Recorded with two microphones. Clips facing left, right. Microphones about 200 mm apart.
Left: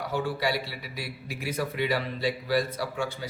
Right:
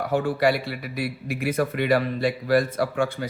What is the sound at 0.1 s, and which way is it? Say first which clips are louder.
A woman's voice: right 7 dB; 55° right (ahead or behind).